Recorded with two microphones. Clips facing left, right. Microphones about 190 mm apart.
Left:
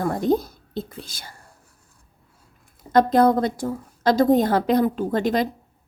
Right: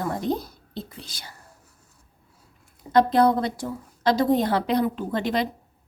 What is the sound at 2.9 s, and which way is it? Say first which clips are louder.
A woman's voice: left 2 dB; 45° left (ahead or behind).